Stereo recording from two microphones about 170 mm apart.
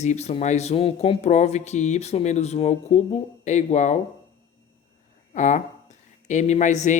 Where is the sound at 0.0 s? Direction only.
40° left (ahead or behind).